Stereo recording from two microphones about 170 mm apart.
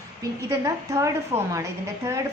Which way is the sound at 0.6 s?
15° right (ahead or behind).